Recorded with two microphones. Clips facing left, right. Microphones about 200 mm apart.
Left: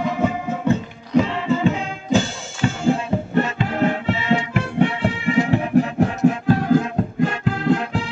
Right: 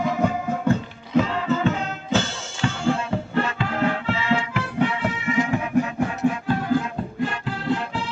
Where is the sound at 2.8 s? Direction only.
20° left (ahead or behind).